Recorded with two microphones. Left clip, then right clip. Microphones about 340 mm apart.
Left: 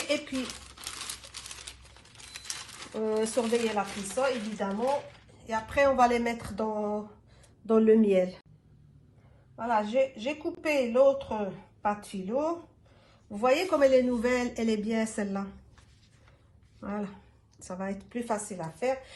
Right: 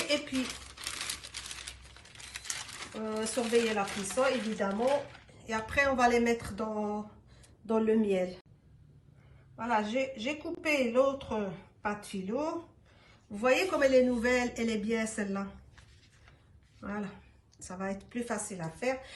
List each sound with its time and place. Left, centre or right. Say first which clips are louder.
0.1 s a sound: left 3 dB; centre
0.4 s coin: even; centre
3.1 s a woman's voice: left 3 dB; centre
9.6 s a woman's voice: left 4 dB; centre
16.8 s a woman's voice: left 3 dB; centre